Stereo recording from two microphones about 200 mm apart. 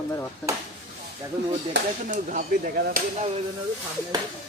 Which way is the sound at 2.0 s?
45° right (ahead or behind).